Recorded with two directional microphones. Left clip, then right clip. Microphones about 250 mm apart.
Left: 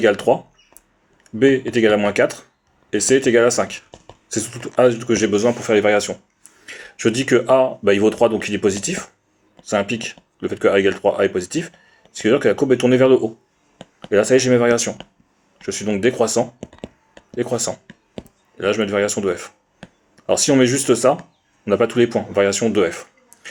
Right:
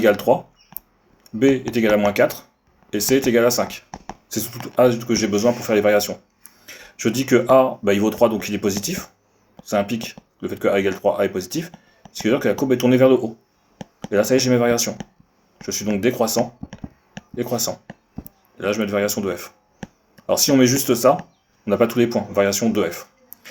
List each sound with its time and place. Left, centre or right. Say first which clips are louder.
0.0 s speech: left 1 dB; left